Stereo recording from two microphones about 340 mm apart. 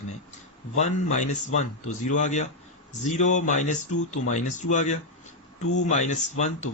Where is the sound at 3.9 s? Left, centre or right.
Left.